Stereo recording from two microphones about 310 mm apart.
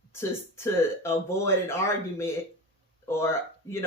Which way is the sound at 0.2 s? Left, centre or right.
Centre.